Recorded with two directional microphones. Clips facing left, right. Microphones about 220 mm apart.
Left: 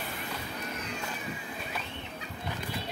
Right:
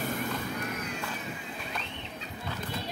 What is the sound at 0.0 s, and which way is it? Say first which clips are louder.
Vehicle: right 7 dB; 45° right (ahead or behind).